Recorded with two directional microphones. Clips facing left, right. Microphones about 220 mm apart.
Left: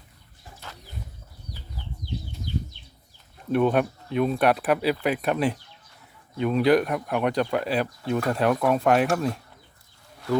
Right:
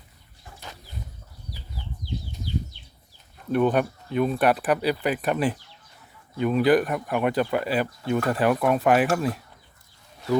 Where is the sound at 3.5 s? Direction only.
Centre (ahead or behind).